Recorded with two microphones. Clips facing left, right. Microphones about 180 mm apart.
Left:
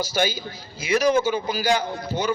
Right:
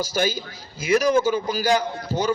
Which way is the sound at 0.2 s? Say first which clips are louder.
Even; 45° right (ahead or behind).